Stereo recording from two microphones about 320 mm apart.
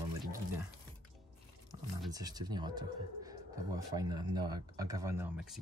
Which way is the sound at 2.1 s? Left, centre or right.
Centre.